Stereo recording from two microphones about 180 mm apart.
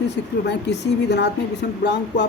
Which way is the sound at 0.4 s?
70° left (ahead or behind).